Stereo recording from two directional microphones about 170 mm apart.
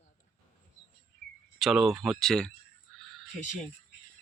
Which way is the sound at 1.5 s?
Centre (ahead or behind).